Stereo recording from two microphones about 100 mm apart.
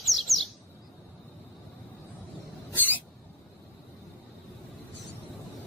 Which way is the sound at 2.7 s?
20° left (ahead or behind).